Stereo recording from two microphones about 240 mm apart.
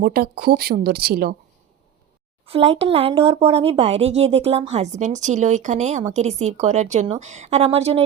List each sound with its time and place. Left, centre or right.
0.0 s a woman's voice: right
2.5 s speech: right